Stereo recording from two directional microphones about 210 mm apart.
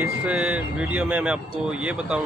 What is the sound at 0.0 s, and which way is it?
Speech, 5° right (ahead or behind).